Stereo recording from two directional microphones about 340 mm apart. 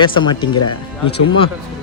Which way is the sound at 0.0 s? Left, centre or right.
Centre.